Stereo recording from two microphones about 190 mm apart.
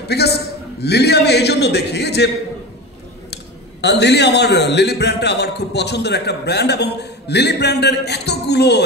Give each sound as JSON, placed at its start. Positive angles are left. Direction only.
{"t": 0.1, "sound": "a man's voice", "side_deg": 60}
{"t": 3.8, "sound": "a man's voice", "side_deg": 65}